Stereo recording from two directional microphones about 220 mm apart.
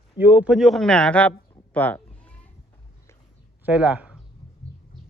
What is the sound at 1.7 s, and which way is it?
Sheep, 5° left (ahead or behind).